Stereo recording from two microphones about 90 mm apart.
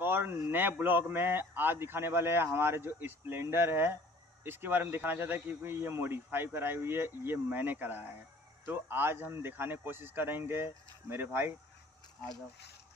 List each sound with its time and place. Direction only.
0.0 s speech: 20° right (ahead or behind)